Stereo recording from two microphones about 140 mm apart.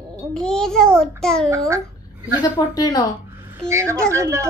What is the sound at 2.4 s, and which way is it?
Speech, 30° left (ahead or behind).